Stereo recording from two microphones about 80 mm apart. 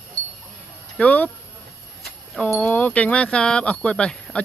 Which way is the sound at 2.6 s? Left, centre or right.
Left.